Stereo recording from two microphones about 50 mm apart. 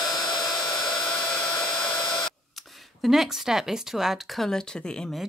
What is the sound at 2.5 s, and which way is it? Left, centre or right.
Speech, centre.